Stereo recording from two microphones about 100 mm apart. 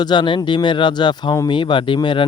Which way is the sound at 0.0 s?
50° left (ahead or behind).